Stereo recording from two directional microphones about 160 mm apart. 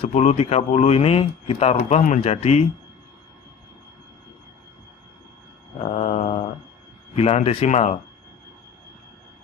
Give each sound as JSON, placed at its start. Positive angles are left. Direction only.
{"t": 0.0, "sound": "speech", "side_deg": 45}
{"t": 5.9, "sound": "mantra", "side_deg": 45}
{"t": 7.2, "sound": "a man's voice", "side_deg": 40}